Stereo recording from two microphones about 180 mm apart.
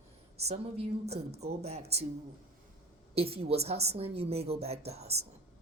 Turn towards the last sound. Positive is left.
turn(degrees=-35)  # may be behind; listen again after turning